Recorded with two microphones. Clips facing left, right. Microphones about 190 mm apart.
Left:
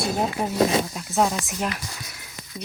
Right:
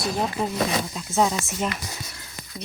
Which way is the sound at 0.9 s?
Centre (ahead or behind).